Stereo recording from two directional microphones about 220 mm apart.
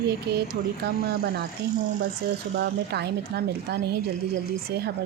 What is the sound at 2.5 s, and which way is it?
A woman's voice, 50° right (ahead or behind).